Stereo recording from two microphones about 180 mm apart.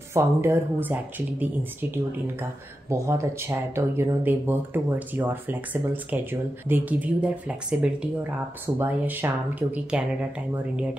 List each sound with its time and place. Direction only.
0.1 s speech: 15° right (ahead or behind)